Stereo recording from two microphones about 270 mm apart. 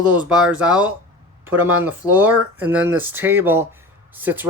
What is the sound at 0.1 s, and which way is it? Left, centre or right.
Speech, centre.